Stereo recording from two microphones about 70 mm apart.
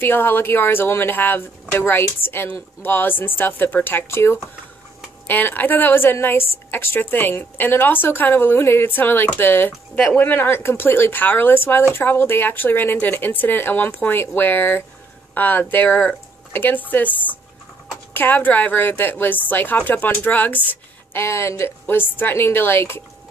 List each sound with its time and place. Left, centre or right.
0.0 s a woman's voice: left
5.2 s a woman's voice: left
21.2 s a woman's voice: left